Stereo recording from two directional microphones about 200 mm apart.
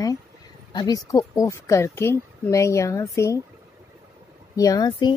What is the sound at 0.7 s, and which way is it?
Speech, 20° left (ahead or behind).